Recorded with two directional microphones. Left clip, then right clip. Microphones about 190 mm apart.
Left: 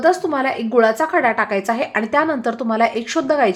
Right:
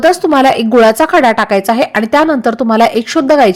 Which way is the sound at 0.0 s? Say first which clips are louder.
Right 9 dB; 35° right (ahead or behind).